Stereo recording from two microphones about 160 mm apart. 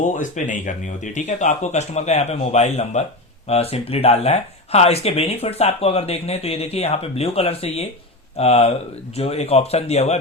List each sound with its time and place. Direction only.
0.0 s speech: 50° left (ahead or behind)